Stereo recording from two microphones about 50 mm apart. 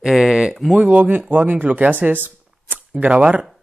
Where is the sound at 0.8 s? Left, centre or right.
Right.